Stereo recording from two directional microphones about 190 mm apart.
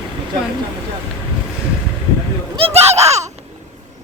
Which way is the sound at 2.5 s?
35° right (ahead or behind).